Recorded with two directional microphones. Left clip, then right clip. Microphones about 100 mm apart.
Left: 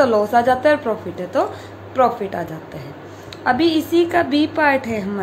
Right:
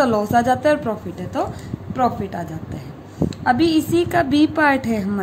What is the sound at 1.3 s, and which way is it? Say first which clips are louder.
A woman's voice: left 4 dB; 45° right (ahead or behind).